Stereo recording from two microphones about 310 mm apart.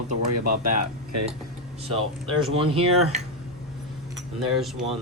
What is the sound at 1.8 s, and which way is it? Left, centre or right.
Speech, centre.